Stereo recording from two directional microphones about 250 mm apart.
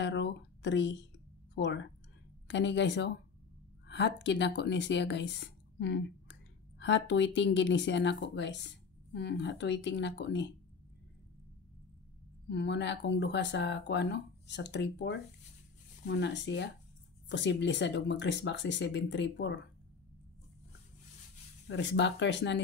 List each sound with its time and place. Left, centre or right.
0.0 s speech: left
12.4 s speech: left
21.6 s speech: left